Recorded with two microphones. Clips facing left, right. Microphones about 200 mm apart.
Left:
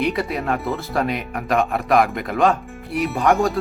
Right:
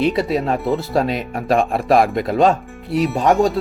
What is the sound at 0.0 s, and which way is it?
Speech, 25° right (ahead or behind).